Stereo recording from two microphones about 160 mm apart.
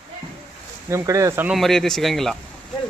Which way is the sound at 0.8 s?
20° right (ahead or behind).